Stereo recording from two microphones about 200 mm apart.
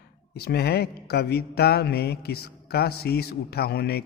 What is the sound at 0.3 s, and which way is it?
Speech, 55° left (ahead or behind).